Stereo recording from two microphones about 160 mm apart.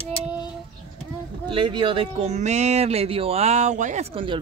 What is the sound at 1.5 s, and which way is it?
Speech, 30° right (ahead or behind).